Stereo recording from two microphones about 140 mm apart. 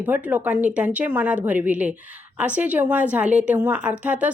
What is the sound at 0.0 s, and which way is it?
Speech, 10° right (ahead or behind).